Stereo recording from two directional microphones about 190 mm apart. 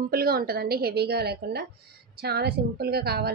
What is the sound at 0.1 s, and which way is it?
A woman's voice, 50° right (ahead or behind).